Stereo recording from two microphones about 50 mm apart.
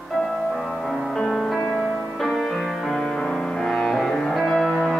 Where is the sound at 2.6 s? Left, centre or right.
Centre.